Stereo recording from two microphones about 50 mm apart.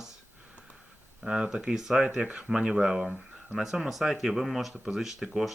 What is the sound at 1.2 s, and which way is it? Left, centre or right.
Speech, centre.